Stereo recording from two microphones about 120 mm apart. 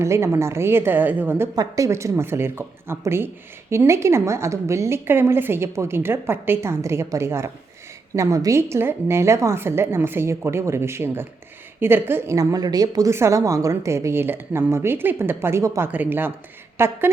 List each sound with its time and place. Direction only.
0.0 s a woman's voice: 25° right (ahead or behind)
1.5 s a woman's voice: 30° right (ahead or behind)